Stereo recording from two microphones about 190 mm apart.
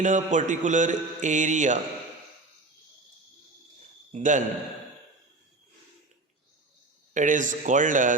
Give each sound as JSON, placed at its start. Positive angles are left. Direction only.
{"t": 0.0, "sound": "mantra", "side_deg": -40}
{"t": 4.1, "sound": "mantra", "side_deg": -40}
{"t": 7.1, "sound": "speech", "side_deg": -40}